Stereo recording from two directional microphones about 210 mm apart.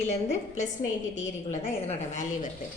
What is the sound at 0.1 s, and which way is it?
A woman's voice, 35° left (ahead or behind).